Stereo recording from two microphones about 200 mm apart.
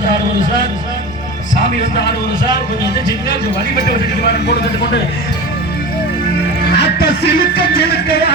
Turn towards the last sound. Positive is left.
turn(degrees=50)  # may be behind; listen again after turning